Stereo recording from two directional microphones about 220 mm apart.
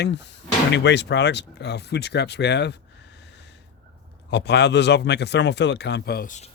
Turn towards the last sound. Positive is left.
turn(degrees=35)  # may be behind; listen again after turning